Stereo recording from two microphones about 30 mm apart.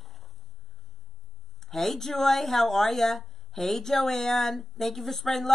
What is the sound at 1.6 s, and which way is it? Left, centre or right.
Speech, centre.